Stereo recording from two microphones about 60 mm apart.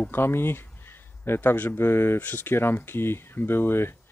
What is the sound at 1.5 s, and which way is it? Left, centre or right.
Speech, left.